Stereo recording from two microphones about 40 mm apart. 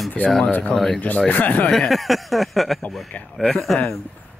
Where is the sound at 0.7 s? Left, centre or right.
Left.